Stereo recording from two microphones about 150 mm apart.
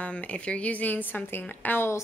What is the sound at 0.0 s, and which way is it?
A woman's voice, 10° left (ahead or behind).